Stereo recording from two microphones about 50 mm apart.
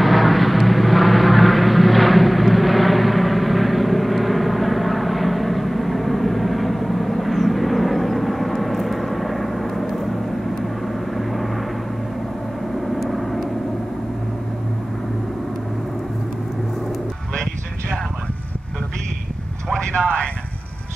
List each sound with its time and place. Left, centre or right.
0.0 s vehicle: centre
12.9 s vehicle: centre
19.7 s vehicle: left